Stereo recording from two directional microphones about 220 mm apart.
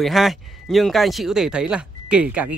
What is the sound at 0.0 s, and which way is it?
Speech, centre (ahead or behind).